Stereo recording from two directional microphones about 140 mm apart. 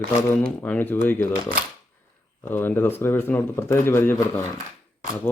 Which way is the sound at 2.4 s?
15° left (ahead or behind).